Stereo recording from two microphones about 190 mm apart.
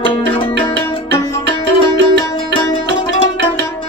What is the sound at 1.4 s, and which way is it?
Music, 65° right (ahead or behind).